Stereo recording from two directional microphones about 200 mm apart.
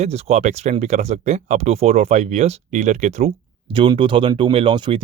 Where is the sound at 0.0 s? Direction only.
30° right (ahead or behind).